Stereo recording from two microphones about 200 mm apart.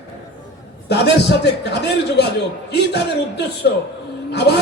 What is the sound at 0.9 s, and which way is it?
A man's voice, 55° left (ahead or behind).